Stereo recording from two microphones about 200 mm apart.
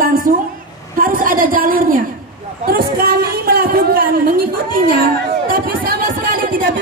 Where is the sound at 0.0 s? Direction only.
45° right (ahead or behind).